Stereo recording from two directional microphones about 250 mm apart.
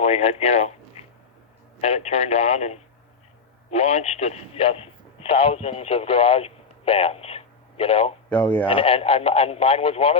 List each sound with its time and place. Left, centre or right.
0.0 s a man's voice: left
8.3 s speech: centre
8.6 s speech: left